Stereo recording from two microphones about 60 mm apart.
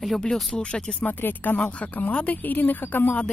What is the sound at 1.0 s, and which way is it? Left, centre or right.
Speech, left.